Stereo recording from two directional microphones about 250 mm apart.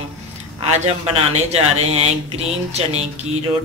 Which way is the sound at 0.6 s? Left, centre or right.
Right.